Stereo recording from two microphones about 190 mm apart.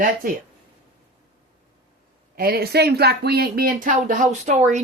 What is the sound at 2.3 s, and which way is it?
Speech, 55° right (ahead or behind).